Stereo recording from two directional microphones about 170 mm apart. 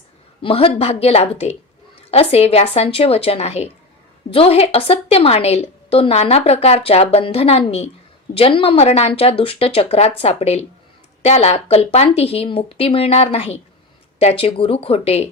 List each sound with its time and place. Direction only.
0.4 s a woman's voice: 35° left (ahead or behind)